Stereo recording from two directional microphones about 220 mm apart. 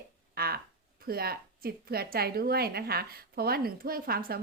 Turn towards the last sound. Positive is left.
turn(degrees=-45)  # may be behind; listen again after turning